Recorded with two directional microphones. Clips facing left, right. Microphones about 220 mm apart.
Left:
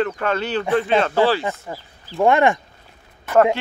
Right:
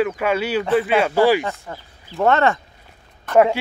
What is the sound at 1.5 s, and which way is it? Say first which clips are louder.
Speech: left 2 dB; centre (ahead or behind).